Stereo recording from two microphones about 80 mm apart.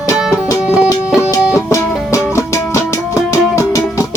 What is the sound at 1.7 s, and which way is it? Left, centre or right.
Music, left.